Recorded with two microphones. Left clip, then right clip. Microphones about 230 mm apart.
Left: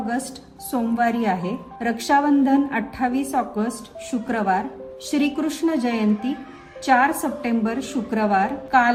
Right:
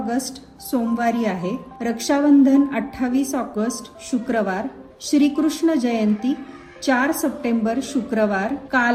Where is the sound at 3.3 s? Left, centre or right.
Right.